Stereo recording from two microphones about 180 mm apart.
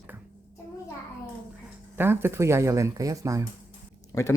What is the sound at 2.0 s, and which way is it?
Speech, 15° right (ahead or behind).